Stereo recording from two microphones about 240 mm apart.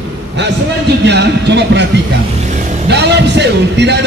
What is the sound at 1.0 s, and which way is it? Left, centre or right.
Speech, right.